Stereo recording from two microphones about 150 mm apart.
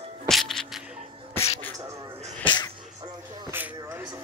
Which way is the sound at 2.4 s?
30° left (ahead or behind).